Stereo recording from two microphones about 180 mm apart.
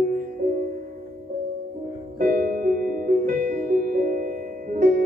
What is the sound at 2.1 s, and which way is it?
Music, 50° right (ahead or behind).